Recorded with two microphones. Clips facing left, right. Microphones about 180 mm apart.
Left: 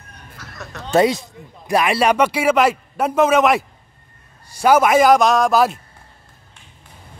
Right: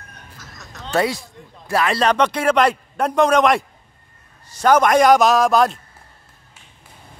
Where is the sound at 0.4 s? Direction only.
65° left (ahead or behind).